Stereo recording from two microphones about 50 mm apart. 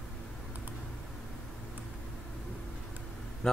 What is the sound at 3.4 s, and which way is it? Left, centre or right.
Speech, centre.